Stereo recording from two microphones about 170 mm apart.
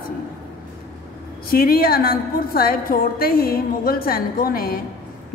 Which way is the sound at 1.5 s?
60° left (ahead or behind).